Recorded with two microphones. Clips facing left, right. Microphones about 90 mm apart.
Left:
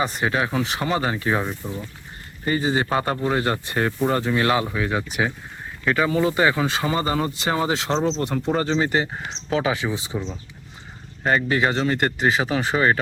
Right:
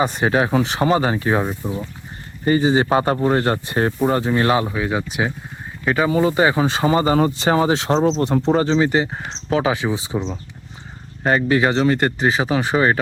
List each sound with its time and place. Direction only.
0.0 s a man's voice: 25° right (ahead or behind)
3.9 s a man's voice: 15° right (ahead or behind)
7.9 s speech: 10° right (ahead or behind)
8.2 s a man's voice: 30° right (ahead or behind)
11.2 s a man's voice: 35° right (ahead or behind)